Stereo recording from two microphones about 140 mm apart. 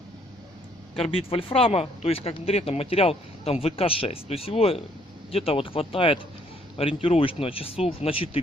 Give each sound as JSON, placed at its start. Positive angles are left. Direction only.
{"t": 0.9, "sound": "speech", "side_deg": 40}